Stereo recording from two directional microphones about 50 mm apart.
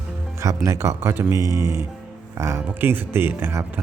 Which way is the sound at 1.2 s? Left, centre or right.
Right.